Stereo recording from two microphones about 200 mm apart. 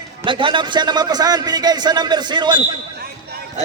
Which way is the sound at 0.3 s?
25° right (ahead or behind).